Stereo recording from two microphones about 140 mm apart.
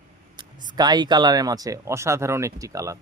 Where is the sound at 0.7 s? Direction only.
30° right (ahead or behind).